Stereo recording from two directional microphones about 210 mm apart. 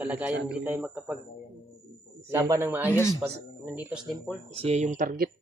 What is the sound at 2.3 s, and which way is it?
Speech, 15° right (ahead or behind).